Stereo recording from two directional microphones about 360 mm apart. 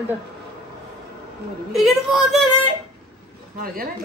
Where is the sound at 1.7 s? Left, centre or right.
Centre.